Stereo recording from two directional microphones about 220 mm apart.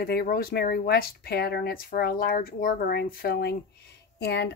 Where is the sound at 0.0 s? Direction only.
45° left (ahead or behind).